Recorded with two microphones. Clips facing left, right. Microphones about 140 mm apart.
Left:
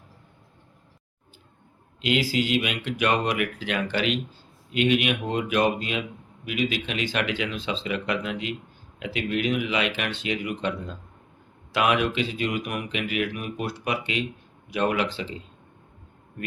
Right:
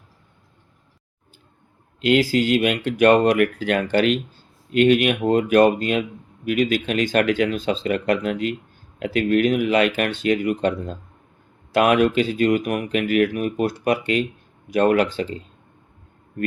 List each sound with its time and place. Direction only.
2.0 s speech: 45° right (ahead or behind)